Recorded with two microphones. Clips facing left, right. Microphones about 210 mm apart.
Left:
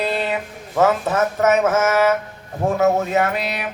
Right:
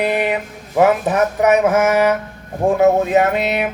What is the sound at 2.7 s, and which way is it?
Speech, 15° right (ahead or behind).